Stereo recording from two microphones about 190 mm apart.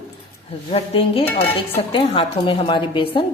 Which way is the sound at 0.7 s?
30° left (ahead or behind).